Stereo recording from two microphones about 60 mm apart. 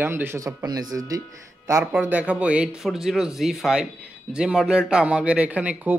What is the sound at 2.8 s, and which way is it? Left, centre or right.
Speech, centre.